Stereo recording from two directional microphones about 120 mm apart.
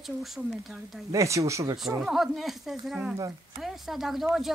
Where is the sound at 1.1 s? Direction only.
25° right (ahead or behind).